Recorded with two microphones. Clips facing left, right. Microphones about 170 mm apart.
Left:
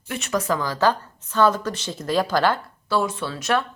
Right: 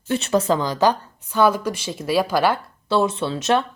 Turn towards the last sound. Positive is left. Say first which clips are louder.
# right 3 dB
turn(degrees=-20)  # may be behind; listen again after turning